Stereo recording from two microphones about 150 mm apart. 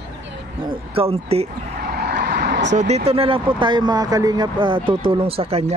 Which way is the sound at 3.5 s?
30° right (ahead or behind).